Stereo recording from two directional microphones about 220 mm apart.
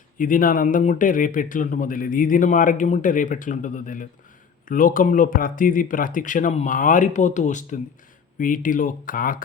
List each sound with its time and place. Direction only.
0.2 s speech: 40° left (ahead or behind)